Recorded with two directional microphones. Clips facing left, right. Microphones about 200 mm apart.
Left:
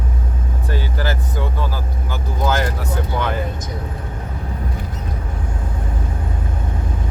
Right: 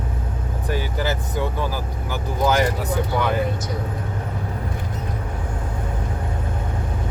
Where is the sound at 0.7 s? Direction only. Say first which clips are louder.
Even; 15° right (ahead or behind).